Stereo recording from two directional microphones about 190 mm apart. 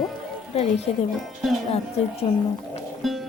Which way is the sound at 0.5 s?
30° left (ahead or behind).